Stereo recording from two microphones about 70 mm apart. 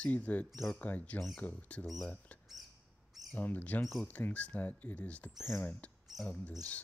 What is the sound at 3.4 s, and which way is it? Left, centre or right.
Speech, left.